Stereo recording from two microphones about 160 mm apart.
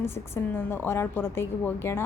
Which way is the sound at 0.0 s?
15° left (ahead or behind).